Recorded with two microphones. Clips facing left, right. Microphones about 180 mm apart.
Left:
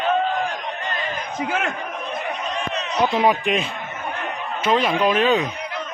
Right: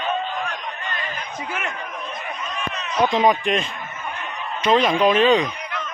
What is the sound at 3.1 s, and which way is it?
Speech, 10° left (ahead or behind).